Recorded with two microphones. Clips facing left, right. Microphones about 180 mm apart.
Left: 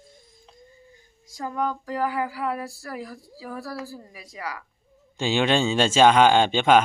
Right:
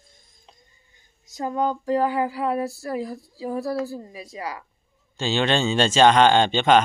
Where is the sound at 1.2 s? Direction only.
25° right (ahead or behind).